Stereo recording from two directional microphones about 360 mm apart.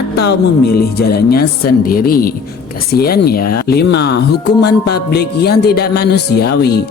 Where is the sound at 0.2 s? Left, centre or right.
Left.